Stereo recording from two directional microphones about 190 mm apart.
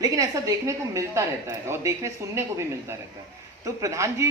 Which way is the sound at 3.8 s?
15° right (ahead or behind).